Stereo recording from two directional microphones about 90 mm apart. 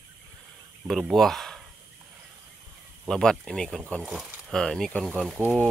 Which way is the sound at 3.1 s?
10° left (ahead or behind).